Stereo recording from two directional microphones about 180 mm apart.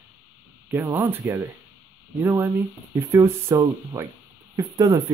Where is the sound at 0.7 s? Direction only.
10° right (ahead or behind).